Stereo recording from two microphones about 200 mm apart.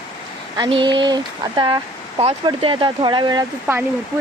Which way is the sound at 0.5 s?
20° right (ahead or behind).